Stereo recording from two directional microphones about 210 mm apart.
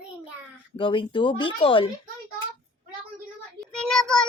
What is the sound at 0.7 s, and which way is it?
Speech, 25° left (ahead or behind).